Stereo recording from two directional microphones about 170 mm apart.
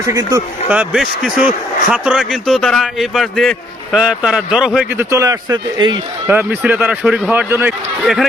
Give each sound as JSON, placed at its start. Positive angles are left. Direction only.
{"t": 0.0, "sound": "speech", "side_deg": -20}
{"t": 0.7, "sound": "speech", "side_deg": -5}
{"t": 5.1, "sound": "speech", "side_deg": -20}
{"t": 6.2, "sound": "speech", "side_deg": -10}
{"t": 8.0, "sound": "speech", "side_deg": 0}